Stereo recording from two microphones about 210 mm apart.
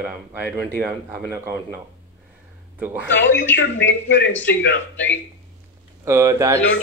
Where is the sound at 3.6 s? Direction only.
60° left (ahead or behind).